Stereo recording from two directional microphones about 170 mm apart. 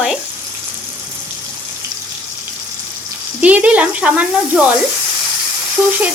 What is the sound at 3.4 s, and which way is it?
Speech, 10° right (ahead or behind).